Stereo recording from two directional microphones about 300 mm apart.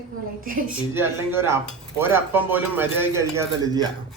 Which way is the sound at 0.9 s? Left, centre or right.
Centre.